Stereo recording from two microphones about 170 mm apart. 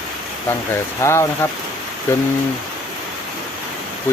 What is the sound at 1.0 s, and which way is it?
Speech, 15° left (ahead or behind).